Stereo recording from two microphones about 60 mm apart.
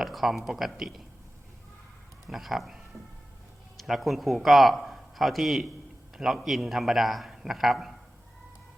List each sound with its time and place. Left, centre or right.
0.0 s a man's voice: centre
2.2 s a man's voice: centre